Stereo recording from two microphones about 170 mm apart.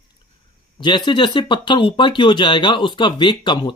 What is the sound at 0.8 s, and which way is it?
Speech, 25° left (ahead or behind).